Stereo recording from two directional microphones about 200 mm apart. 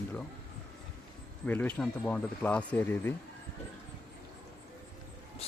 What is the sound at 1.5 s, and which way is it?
Speech, 10° left (ahead or behind).